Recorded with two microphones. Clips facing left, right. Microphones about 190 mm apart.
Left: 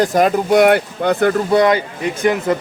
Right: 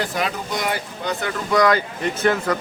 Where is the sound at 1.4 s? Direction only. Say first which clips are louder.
Left 1 dB; 25° left (ahead or behind).